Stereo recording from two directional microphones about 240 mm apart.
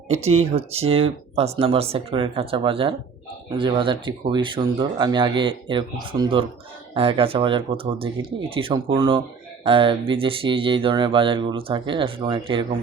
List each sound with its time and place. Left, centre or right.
0.1 s speech: right